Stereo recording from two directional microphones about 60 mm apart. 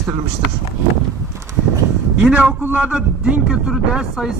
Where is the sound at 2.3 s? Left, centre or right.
Right.